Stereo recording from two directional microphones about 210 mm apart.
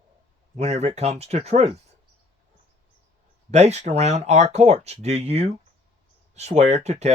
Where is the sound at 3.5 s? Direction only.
30° right (ahead or behind).